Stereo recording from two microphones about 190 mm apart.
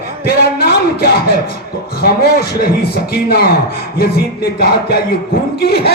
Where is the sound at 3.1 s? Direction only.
55° left (ahead or behind).